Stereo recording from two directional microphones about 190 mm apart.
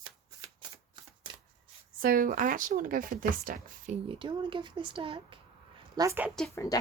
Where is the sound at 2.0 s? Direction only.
45° right (ahead or behind).